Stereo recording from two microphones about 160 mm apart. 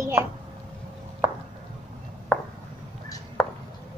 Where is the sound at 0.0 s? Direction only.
15° right (ahead or behind).